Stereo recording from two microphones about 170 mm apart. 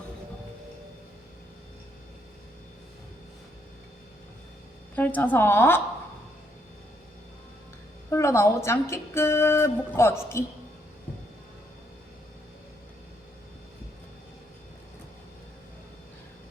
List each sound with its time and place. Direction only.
4.9 s a woman's voice: 10° left (ahead or behind)
8.1 s a woman's voice: 15° left (ahead or behind)